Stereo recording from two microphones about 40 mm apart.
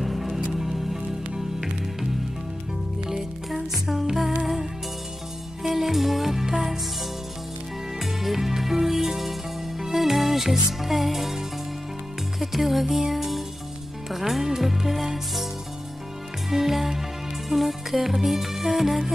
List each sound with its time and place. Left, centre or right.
0.0 s music: centre
3.1 s music: centre
8.0 s music: centre
16.4 s music: centre